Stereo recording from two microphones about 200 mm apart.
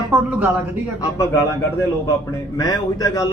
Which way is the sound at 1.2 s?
15° left (ahead or behind).